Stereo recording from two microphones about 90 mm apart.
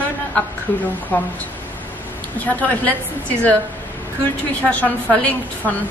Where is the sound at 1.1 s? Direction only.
20° left (ahead or behind).